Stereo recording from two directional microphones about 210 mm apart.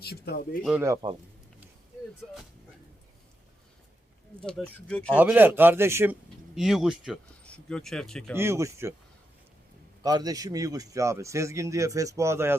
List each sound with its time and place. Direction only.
0.0 s speech: 50° left (ahead or behind)
0.6 s speech: 5° right (ahead or behind)
2.2 s speech: 5° left (ahead or behind)
4.4 s speech: 5° left (ahead or behind)
5.1 s speech: 10° right (ahead or behind)
8.4 s speech: 15° right (ahead or behind)
10.0 s speech: 20° right (ahead or behind)